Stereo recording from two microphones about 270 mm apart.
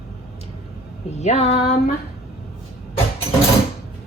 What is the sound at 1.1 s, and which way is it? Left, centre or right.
Speech, left.